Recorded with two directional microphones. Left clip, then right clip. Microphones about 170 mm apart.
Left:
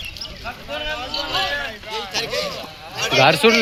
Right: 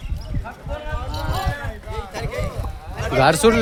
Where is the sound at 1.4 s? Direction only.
55° right (ahead or behind).